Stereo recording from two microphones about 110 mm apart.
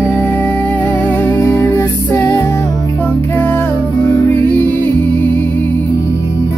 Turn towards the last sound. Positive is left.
turn(degrees=15)  # may be behind; listen again after turning